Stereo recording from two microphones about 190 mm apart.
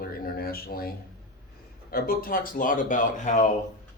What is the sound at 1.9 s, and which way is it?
Speech, 50° left (ahead or behind).